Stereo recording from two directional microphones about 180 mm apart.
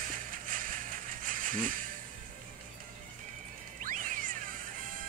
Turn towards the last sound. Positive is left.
turn(degrees=-50)  # may be behind; listen again after turning